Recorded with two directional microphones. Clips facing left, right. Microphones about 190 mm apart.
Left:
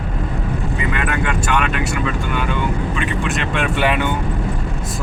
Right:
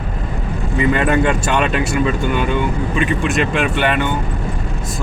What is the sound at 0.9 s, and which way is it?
Speech, 30° right (ahead or behind).